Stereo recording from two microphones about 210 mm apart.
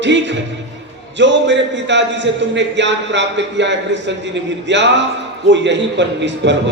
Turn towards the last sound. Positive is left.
turn(degrees=-60)  # may be behind; listen again after turning